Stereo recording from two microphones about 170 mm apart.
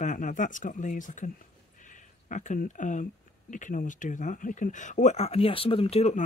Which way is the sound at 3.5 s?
50° left (ahead or behind).